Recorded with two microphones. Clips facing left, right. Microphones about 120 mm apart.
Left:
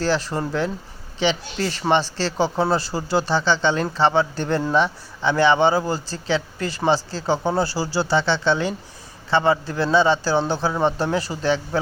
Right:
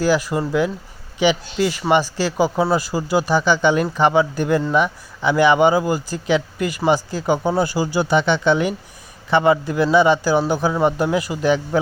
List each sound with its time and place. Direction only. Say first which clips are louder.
0.0 s speech: right 4 dB; 10° right (ahead or behind)